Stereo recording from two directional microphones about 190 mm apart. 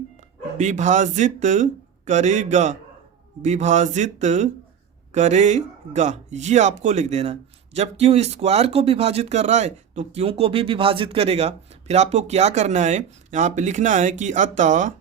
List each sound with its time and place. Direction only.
0.6 s speech: 40° right (ahead or behind)